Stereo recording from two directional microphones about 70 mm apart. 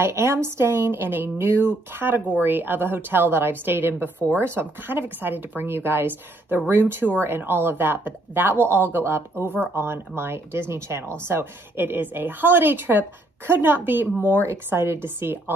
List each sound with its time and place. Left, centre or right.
0.0 s a woman's voice: right